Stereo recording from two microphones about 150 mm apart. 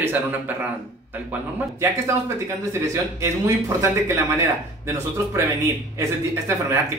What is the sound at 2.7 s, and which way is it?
Speech, 20° right (ahead or behind).